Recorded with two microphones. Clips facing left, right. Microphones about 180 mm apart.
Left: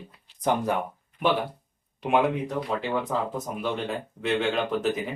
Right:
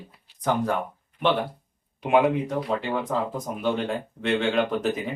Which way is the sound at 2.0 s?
Centre (ahead or behind).